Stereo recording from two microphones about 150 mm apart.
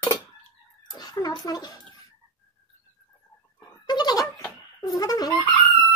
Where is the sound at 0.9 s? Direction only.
25° left (ahead or behind).